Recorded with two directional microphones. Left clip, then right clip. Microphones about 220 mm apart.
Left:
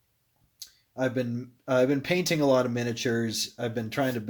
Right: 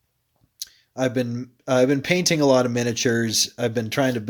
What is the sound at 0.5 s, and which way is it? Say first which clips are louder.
Speech: right 5 dB; 35° right (ahead or behind).